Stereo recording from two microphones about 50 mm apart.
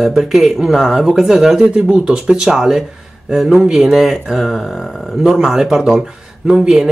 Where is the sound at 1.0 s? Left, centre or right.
Centre.